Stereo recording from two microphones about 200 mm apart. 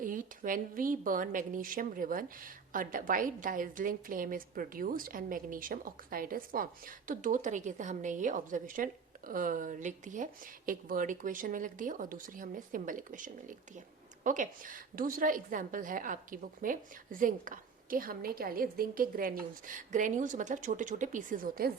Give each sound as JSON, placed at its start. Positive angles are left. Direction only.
{"t": 0.0, "sound": "a woman's voice", "side_deg": -40}